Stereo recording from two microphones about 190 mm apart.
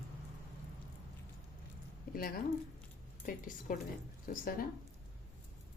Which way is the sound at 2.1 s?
50° left (ahead or behind).